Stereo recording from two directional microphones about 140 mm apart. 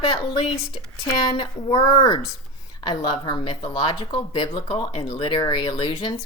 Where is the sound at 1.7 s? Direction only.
25° left (ahead or behind); by 5.3 s 45° left (ahead or behind).